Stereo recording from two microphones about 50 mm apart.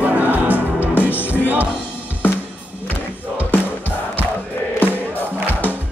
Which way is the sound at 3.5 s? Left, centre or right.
Left.